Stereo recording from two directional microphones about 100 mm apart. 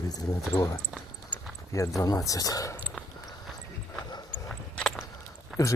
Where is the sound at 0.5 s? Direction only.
55° left (ahead or behind).